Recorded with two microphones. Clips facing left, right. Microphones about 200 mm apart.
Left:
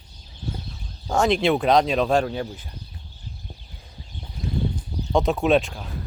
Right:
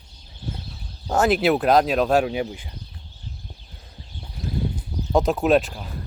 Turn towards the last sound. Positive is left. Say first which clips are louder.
# right 1 dB
turn(degrees=0)  # may be behind; listen again after turning